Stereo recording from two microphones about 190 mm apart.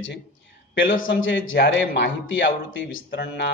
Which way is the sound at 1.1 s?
85° left.